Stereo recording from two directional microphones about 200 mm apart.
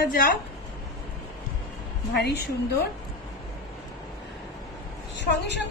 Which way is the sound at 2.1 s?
55° left (ahead or behind).